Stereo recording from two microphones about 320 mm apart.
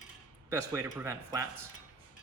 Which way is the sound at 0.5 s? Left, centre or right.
Centre.